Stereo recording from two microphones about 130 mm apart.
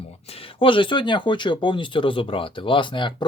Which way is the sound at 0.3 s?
45° left (ahead or behind).